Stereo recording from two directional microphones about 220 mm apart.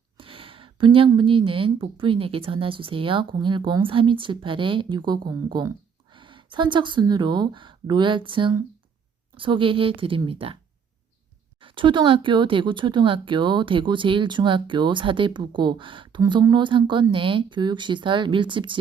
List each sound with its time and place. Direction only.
0.2 s speech: 25° right (ahead or behind)
11.6 s speech: 20° right (ahead or behind)